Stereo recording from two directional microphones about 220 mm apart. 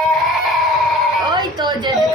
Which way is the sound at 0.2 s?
Centre (ahead or behind).